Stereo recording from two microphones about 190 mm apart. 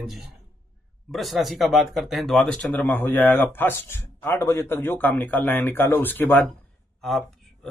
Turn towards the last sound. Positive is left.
turn(degrees=0)  # may be behind; listen again after turning